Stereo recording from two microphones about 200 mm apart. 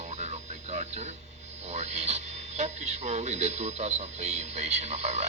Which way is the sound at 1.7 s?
35° right (ahead or behind).